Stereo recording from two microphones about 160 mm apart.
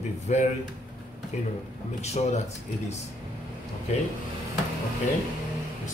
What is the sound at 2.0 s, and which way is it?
Speech, 45° left (ahead or behind).